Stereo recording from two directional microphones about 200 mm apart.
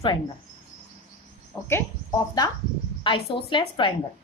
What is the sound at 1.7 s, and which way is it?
A woman's voice, 20° left (ahead or behind).